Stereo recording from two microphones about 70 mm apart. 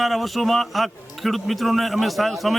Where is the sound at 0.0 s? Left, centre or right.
Centre.